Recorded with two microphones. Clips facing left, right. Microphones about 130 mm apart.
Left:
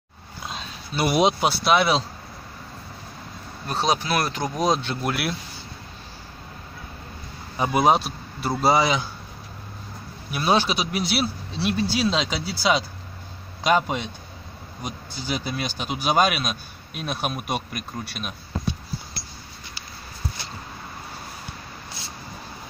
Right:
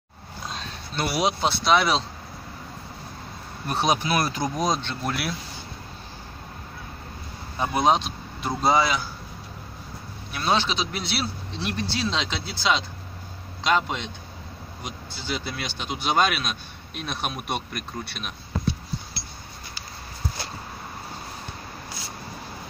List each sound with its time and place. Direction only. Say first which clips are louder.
0.5 s a sound: left 2 dB; 5° left (ahead or behind)
1.0 s speech: left 4 dB; 20° left (ahead or behind)
1.5 s speech: left 1 dB; 5° left (ahead or behind)
3.6 s speech: even; 10° right (ahead or behind)
4.6 s speech: left 6 dB; 5° left (ahead or behind)
7.5 s a man's voice: left 2 dB; 10° left (ahead or behind)
10.3 s a man's voice: left 3 dB; 10° left (ahead or behind)
15.1 s a man's voice: left 3 dB; 15° left (ahead or behind)